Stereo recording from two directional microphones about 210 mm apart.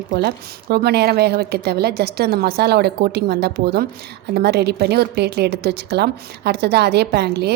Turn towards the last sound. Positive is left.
turn(degrees=-50)  # may be behind; listen again after turning